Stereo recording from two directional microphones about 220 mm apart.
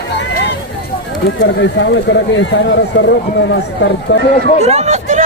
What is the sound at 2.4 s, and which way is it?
Speech, 55° left (ahead or behind).